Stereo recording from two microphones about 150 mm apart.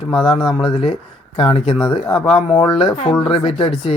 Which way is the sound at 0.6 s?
35° left (ahead or behind).